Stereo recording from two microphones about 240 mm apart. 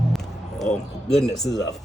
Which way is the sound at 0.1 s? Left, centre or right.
Centre.